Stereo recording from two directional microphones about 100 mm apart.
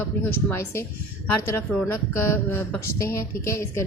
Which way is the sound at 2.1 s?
25° left (ahead or behind).